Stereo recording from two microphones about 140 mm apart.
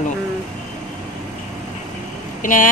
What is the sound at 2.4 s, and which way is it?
Speech, 70° left (ahead or behind).